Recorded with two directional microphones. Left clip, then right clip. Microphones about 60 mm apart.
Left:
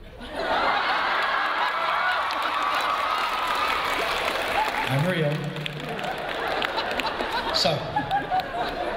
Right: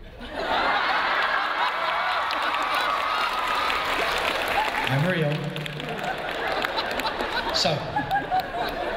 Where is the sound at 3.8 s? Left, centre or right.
Left.